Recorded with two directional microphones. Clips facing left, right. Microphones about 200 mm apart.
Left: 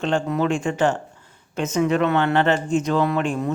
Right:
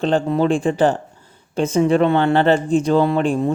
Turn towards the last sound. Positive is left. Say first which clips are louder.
# right 5 dB
turn(degrees=-30)  # may be behind; listen again after turning